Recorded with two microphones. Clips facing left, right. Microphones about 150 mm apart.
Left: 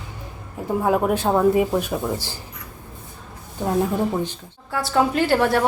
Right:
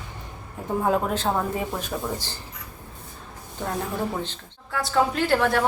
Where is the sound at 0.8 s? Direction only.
10° left (ahead or behind).